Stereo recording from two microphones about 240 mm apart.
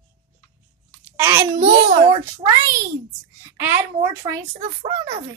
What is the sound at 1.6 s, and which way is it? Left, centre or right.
Speech, right.